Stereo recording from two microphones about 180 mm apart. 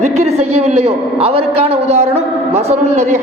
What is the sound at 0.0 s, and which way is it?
A man's voice, 40° right (ahead or behind).